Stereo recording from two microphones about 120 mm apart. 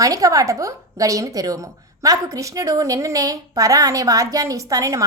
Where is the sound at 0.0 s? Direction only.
30° right (ahead or behind).